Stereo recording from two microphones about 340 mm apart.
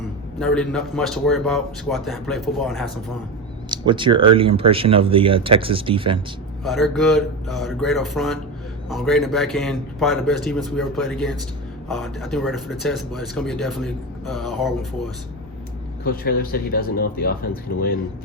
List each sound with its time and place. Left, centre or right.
0.3 s speech: centre
3.7 s speech: centre
6.7 s speech: centre
16.0 s speech: left